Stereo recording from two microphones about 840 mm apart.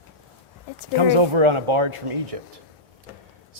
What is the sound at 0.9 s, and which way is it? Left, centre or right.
Speech, right.